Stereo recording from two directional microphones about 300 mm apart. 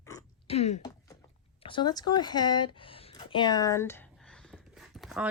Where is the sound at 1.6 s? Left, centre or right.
Centre.